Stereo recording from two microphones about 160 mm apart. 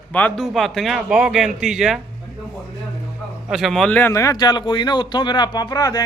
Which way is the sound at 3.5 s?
Centre (ahead or behind).